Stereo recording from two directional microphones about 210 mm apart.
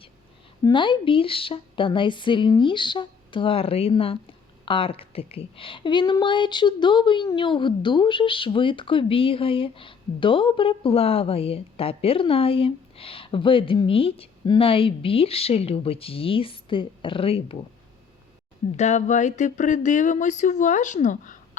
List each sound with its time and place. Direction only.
0.6 s a woman's voice: 25° left (ahead or behind)
18.8 s speech: 35° left (ahead or behind)